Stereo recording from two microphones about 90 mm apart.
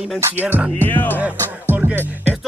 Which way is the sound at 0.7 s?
20° left (ahead or behind).